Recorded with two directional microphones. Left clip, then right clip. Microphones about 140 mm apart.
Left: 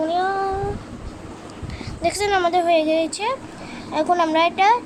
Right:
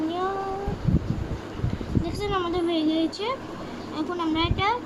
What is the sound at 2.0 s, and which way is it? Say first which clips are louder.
A child's voice: left 10 dB; 80° left.